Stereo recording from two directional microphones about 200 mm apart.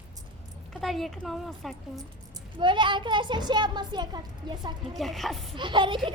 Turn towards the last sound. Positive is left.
turn(degrees=-25)  # may be behind; listen again after turning